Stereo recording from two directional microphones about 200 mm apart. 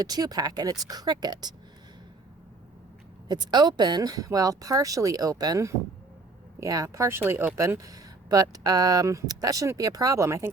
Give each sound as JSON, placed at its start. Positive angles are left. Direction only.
{"t": 0.0, "sound": "speech", "side_deg": -20}
{"t": 3.2, "sound": "speech", "side_deg": -20}